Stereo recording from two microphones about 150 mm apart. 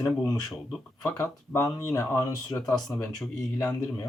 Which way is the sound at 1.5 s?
20° left (ahead or behind).